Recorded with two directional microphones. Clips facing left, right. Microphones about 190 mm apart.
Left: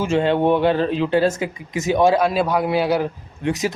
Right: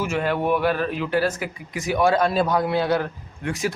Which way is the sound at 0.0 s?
25° left (ahead or behind).